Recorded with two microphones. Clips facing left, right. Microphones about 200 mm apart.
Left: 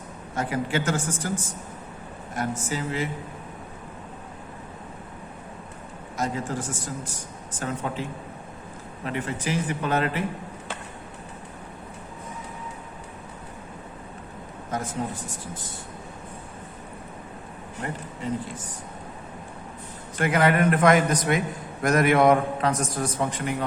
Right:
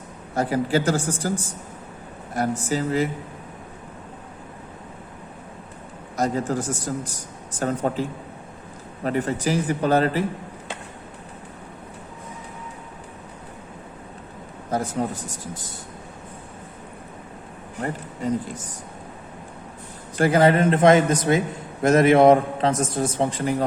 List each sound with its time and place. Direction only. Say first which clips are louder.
0.3 s speech: right 5 dB; 35° right (ahead or behind)
2.3 s speech: right 5 dB; 35° right (ahead or behind)
6.1 s speech: right 5 dB; 40° right (ahead or behind)
9.0 s speech: right 6 dB; 40° right (ahead or behind)
14.7 s speech: right 5 dB; 35° right (ahead or behind)
20.1 s a man's voice: right 4 dB; 30° right (ahead or behind)